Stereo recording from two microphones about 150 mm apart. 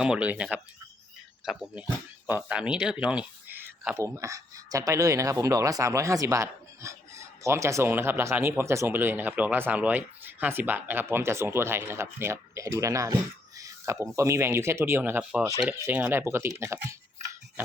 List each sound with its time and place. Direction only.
0.0 s speech: 5° right (ahead or behind)
13.6 s a sound: 20° right (ahead or behind)
14.2 s speech: 20° right (ahead or behind)
15.4 s speech: 20° right (ahead or behind)